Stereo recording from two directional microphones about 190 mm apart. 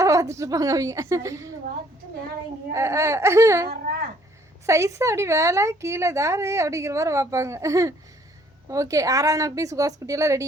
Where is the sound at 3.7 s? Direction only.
45° right (ahead or behind).